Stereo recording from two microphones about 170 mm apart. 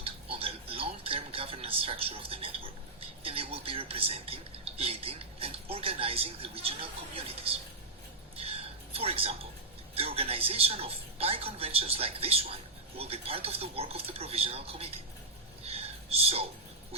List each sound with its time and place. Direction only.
0.0 s music: 35° right (ahead or behind)
3.2 s speech: 35° right (ahead or behind)
8.4 s a sound: 35° right (ahead or behind)
9.9 s speech: 35° right (ahead or behind)
15.6 s whispering: 35° right (ahead or behind)